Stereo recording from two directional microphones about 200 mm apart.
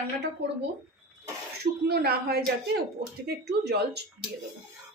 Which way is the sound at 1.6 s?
50° right (ahead or behind).